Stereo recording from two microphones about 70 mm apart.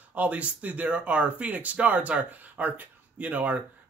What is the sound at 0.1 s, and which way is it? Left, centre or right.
Speech, right.